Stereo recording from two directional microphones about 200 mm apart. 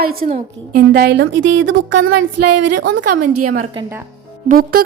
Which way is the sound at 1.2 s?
70° right (ahead or behind).